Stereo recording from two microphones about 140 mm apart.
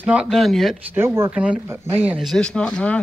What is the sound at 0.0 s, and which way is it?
Speech, 10° right (ahead or behind).